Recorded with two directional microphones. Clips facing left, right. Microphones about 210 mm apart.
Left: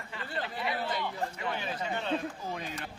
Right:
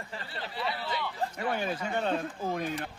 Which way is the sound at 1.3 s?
50° right (ahead or behind).